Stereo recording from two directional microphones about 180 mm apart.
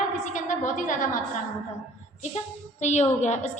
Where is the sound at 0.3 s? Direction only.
45° left (ahead or behind).